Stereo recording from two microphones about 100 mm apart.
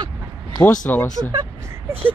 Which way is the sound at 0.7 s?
15° left (ahead or behind).